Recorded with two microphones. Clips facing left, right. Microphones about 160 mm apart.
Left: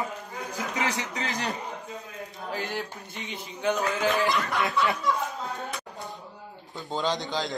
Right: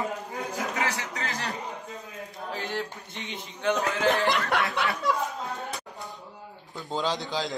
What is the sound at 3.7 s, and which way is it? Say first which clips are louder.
Speech: right 1 dB; 70° right (ahead or behind).